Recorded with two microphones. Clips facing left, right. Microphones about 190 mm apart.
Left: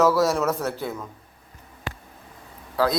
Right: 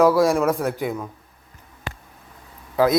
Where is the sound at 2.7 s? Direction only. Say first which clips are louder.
Right 5 dB; 20° right (ahead or behind).